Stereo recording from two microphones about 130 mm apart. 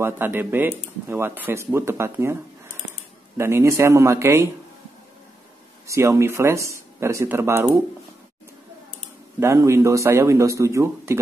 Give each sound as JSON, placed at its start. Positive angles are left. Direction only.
{"t": 0.0, "sound": "speech", "side_deg": -15}
{"t": 3.3, "sound": "speech", "side_deg": -20}
{"t": 5.9, "sound": "speech", "side_deg": -20}
{"t": 9.4, "sound": "speech", "side_deg": -20}